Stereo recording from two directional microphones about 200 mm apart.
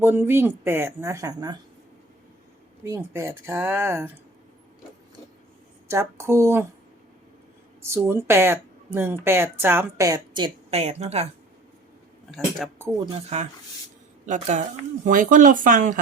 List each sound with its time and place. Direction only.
0.0 s speech: 10° right (ahead or behind)
2.8 s speech: 10° right (ahead or behind)
5.9 s speech: 15° right (ahead or behind)
7.8 s speech: 10° right (ahead or behind); by 11.3 s 30° right (ahead or behind)
12.3 s speech: centre (ahead or behind)
13.3 s speech: 35° right (ahead or behind)